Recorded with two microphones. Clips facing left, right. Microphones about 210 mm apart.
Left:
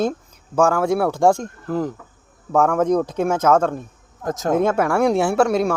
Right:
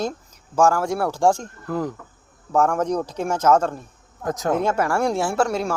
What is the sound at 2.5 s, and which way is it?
Speech, 60° left (ahead or behind).